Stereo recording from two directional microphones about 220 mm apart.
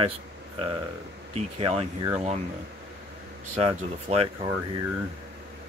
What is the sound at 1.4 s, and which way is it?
Speech, 25° right (ahead or behind).